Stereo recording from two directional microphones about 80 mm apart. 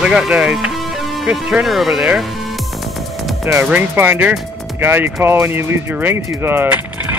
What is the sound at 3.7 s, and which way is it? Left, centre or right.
Speech, right.